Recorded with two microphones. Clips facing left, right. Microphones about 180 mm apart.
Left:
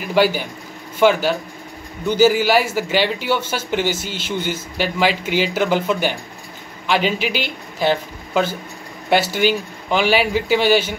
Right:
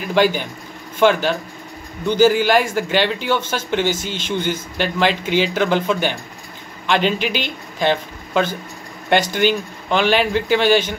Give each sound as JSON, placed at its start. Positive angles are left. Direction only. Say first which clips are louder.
{"t": 0.0, "sound": "a man's voice", "louder": "even", "side_deg": 10}